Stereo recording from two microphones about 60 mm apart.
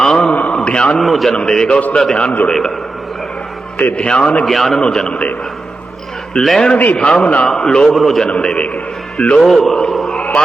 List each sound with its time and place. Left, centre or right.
0.0 s a sound: centre
1.0 s a man's voice: centre
1.3 s a man's voice: centre
3.8 s a man's voice: left
4.4 s a man's voice: centre
6.3 s a man's voice: centre
6.9 s a man's voice: centre
8.3 s a man's voice: centre
9.5 s a man's voice: centre
9.9 s a sound: centre
10.2 s a sound: centre